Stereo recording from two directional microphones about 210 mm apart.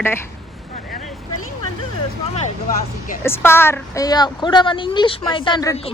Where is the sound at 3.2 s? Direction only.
10° left (ahead or behind).